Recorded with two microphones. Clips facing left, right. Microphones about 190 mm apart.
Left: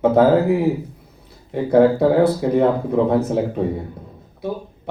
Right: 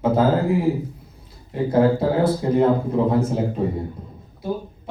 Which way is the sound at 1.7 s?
60° left (ahead or behind).